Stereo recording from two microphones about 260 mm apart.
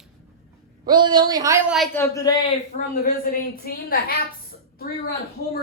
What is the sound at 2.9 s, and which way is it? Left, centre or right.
Speech, left.